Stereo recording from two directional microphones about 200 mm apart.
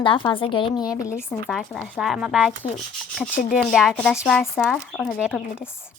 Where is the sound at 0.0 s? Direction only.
25° left (ahead or behind).